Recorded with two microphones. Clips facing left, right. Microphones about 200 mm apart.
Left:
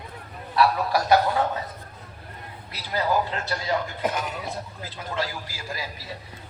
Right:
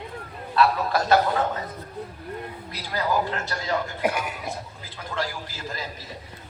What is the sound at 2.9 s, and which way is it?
Speech, 15° left (ahead or behind).